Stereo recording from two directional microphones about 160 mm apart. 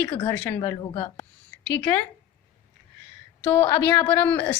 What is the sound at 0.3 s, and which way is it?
Speech, 10° left (ahead or behind).